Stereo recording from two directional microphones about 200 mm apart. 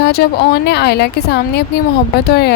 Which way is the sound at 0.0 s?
55° left (ahead or behind).